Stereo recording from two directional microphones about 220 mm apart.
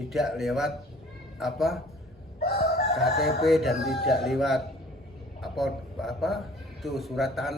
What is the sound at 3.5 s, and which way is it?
A man's voice, centre (ahead or behind).